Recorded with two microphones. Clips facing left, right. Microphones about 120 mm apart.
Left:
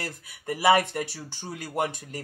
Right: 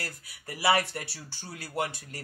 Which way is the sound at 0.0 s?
20° left (ahead or behind).